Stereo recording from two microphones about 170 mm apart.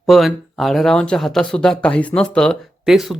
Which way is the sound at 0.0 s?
Centre (ahead or behind).